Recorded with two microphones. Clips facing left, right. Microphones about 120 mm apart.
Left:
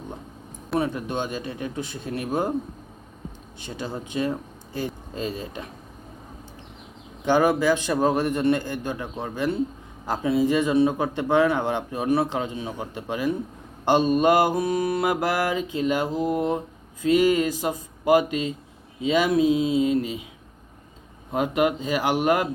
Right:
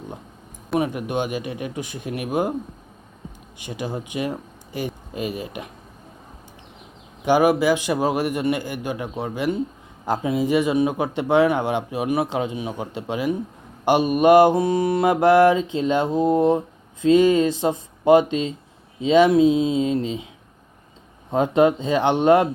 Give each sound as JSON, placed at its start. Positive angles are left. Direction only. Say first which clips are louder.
{"t": 0.8, "sound": "speech", "louder": "right 3 dB", "side_deg": -15}
{"t": 3.6, "sound": "speech", "louder": "right 3 dB", "side_deg": -15}
{"t": 7.3, "sound": "speech", "louder": "right 3 dB", "side_deg": -15}
{"t": 13.8, "sound": "mantra", "louder": "right 3 dB", "side_deg": -15}
{"t": 21.2, "sound": "mantra", "louder": "right 5 dB", "side_deg": -30}